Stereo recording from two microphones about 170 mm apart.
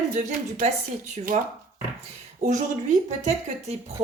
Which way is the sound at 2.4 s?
45° right (ahead or behind).